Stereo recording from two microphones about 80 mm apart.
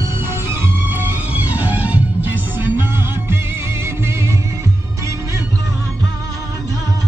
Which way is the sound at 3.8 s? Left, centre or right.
Right.